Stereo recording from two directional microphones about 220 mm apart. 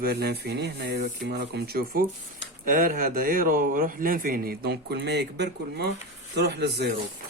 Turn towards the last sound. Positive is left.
turn(degrees=-50)  # may be behind; listen again after turning